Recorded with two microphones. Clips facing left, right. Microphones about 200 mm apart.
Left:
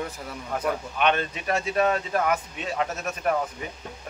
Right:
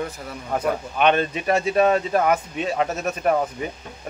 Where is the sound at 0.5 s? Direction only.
30° right (ahead or behind).